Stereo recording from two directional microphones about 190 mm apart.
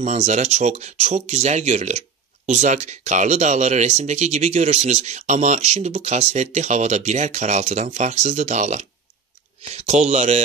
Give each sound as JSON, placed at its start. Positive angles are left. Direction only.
{"t": 0.0, "sound": "speech", "side_deg": -35}